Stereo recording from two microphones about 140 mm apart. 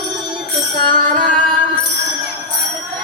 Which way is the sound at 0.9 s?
70° right (ahead or behind).